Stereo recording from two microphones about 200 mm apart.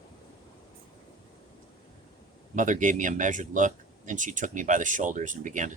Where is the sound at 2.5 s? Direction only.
40° right (ahead or behind).